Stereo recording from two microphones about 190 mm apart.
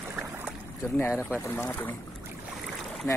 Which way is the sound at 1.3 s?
15° left (ahead or behind).